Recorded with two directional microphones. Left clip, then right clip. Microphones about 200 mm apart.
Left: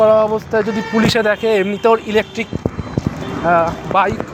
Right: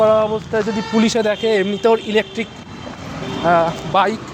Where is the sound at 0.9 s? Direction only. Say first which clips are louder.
Left 3 dB; 15° right (ahead or behind).